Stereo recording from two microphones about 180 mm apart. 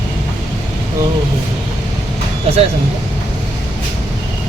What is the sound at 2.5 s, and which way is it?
Speech, 35° right (ahead or behind).